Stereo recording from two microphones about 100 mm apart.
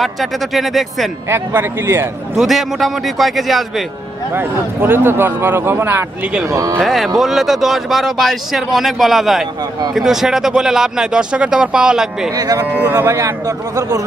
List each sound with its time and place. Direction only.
0.0 s speech: centre (ahead or behind)
1.3 s speech: 25° right (ahead or behind)
2.3 s speech: centre (ahead or behind)
4.3 s speech: 20° right (ahead or behind)
6.8 s speech: centre (ahead or behind)
12.4 s speech: 40° right (ahead or behind)
12.6 s speech: 20° right (ahead or behind); by 14.0 s 35° right (ahead or behind)